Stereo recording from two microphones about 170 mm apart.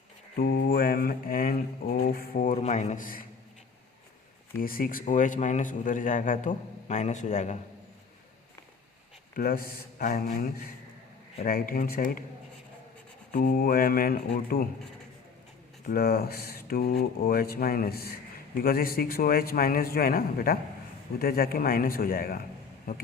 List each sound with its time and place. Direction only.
0.3 s mantra: 65° left (ahead or behind)
4.6 s a man's voice: 55° left (ahead or behind)
9.3 s mantra: 60° left (ahead or behind)
13.3 s mantra: 55° left (ahead or behind)
15.9 s mantra: 65° left (ahead or behind)